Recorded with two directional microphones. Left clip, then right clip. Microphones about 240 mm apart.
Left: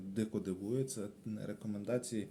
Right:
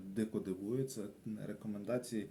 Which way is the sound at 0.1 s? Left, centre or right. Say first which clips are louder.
Even; left.